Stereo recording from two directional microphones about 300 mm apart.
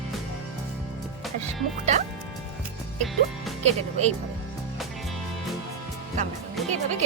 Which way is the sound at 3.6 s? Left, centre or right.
Right.